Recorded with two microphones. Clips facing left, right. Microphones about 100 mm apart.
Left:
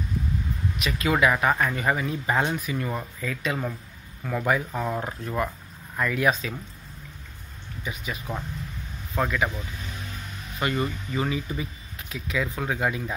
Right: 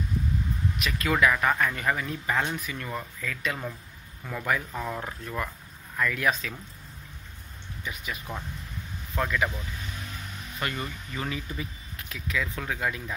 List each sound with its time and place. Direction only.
0.7 s speech: 5° left (ahead or behind)
1.0 s speech: 20° left (ahead or behind)
8.1 s speech: 10° left (ahead or behind)
10.6 s speech: 15° left (ahead or behind)